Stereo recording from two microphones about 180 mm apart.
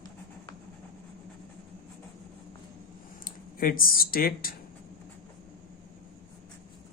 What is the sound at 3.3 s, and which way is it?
Speech, 50° left (ahead or behind).